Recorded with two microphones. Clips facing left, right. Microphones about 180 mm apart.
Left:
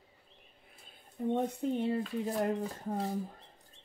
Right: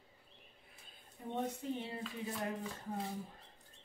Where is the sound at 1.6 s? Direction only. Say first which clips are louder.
Left 8 dB; 60° left (ahead or behind).